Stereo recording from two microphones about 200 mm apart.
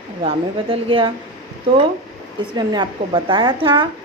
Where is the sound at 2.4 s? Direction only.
25° right (ahead or behind).